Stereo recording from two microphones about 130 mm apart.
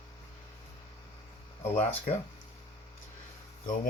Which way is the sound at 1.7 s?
55° left (ahead or behind).